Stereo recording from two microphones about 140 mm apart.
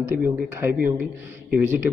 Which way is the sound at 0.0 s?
15° right (ahead or behind).